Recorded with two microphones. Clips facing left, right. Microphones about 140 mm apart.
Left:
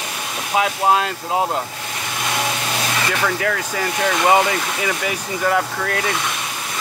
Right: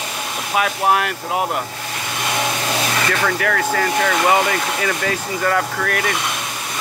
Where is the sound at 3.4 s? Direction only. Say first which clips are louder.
Right 3 dB; 20° left (ahead or behind).